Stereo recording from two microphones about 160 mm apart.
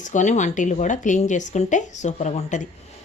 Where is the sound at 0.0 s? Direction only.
50° left (ahead or behind).